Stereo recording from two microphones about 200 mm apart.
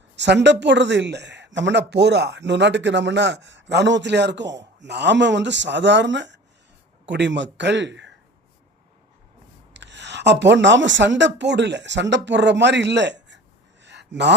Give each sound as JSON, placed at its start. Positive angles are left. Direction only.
{"t": 0.2, "sound": "speech", "side_deg": -60}
{"t": 9.7, "sound": "speech", "side_deg": -60}
{"t": 13.8, "sound": "a sound", "side_deg": -60}